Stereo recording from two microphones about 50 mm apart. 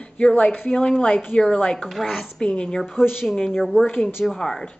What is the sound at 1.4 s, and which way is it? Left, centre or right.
Speech, centre.